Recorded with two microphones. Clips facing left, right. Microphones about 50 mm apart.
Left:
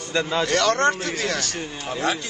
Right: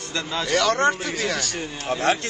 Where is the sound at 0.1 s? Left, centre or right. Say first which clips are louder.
Left 5 dB; centre.